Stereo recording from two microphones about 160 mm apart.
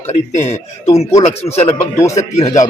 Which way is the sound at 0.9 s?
20° left (ahead or behind).